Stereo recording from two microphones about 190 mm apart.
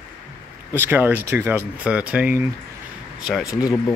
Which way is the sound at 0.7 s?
10° right (ahead or behind).